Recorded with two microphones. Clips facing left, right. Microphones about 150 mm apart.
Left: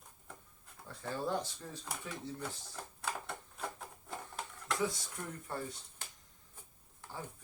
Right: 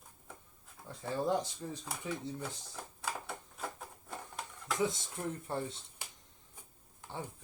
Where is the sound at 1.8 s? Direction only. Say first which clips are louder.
Right 3 dB; 5° right (ahead or behind).